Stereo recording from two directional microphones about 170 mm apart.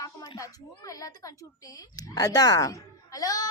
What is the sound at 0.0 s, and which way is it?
A child's voice, 20° left (ahead or behind).